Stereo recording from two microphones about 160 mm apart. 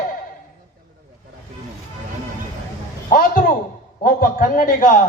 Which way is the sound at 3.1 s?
60° left (ahead or behind).